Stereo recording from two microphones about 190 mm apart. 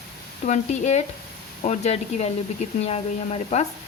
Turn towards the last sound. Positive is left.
turn(degrees=35)  # may be behind; listen again after turning